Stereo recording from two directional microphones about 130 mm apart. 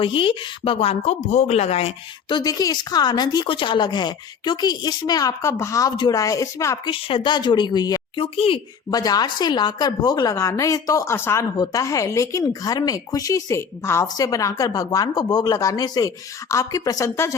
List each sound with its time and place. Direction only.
0.0 s speech: 40° left (ahead or behind)
2.3 s a woman's voice: 30° left (ahead or behind)
6.8 s speech: 40° left (ahead or behind)
8.2 s speech: 45° left (ahead or behind)
8.9 s a woman's voice: 30° left (ahead or behind)
11.5 s a woman's voice: 30° left (ahead or behind)